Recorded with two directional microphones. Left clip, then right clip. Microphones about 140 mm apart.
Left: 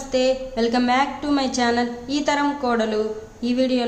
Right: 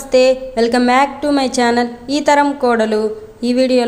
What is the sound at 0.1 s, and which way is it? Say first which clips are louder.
A woman's voice: right 9 dB; 45° right (ahead or behind).